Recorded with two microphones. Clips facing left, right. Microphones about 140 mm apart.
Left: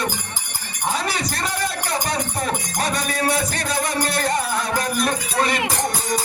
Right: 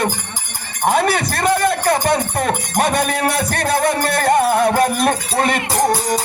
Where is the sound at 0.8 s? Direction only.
60° right (ahead or behind).